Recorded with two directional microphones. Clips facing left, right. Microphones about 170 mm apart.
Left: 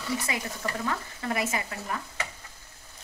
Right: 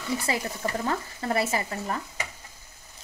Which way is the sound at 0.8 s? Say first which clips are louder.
Right 3 dB; 35° right (ahead or behind).